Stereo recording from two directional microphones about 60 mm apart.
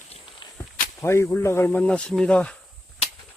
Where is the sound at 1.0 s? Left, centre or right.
Left.